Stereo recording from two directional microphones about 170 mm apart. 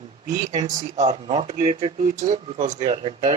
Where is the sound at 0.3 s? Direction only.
45° right (ahead or behind).